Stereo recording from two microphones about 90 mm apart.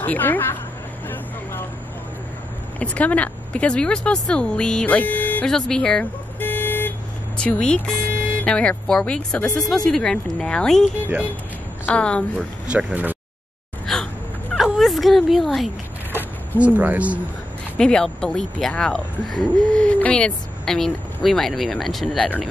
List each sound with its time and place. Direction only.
0.0 s a woman's voice: 20° left (ahead or behind)
1.0 s vehicle: 20° left (ahead or behind)
2.8 s speech: 15° left (ahead or behind)
5.5 s speech: 5° left (ahead or behind)
6.4 s vehicle: 20° left (ahead or behind)
7.3 s speech: 10° left (ahead or behind)
12.7 s speech: 20° right (ahead or behind)
13.9 s gasp: 5° left (ahead or behind)
14.6 s a sound: centre (ahead or behind)
16.1 s a sound: 20° right (ahead or behind)
17.7 s speech: 10° left (ahead or behind)